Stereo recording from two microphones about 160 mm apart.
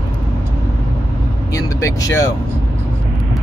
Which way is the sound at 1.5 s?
20° left (ahead or behind).